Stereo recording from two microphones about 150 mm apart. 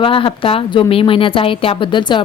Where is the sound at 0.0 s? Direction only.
35° left (ahead or behind).